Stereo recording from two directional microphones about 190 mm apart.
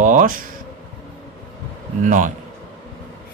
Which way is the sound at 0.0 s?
45° right (ahead or behind).